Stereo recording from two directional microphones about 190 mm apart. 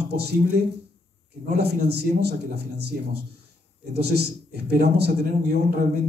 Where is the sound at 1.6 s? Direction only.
60° right (ahead or behind).